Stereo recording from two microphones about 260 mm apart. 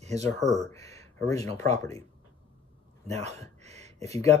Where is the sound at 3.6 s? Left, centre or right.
Right.